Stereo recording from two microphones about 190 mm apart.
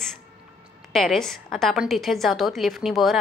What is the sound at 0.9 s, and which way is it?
A woman's voice, centre (ahead or behind).